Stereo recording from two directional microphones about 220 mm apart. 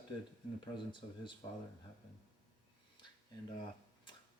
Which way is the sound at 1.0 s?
30° left (ahead or behind).